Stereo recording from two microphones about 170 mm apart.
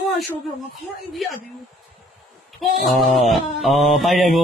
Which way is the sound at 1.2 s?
Centre (ahead or behind).